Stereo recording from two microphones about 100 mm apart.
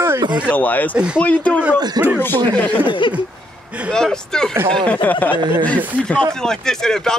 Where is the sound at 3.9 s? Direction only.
5° left (ahead or behind).